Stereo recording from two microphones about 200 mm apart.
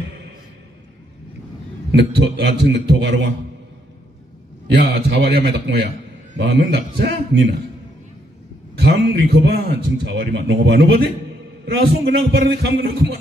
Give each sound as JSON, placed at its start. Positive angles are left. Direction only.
{"t": 1.9, "sound": "a man's voice", "side_deg": -60}
{"t": 4.9, "sound": "a man's voice", "side_deg": -55}
{"t": 8.7, "sound": "a man's voice", "side_deg": -55}